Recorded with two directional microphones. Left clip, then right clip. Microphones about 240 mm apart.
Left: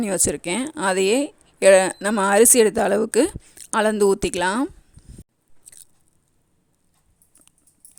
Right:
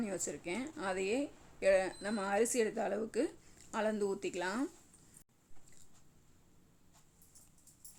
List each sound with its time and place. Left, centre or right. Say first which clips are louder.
0.0 s speech: left 17 dB; left